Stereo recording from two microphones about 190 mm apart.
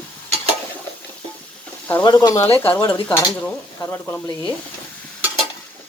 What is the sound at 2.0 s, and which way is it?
Speech, 20° left (ahead or behind).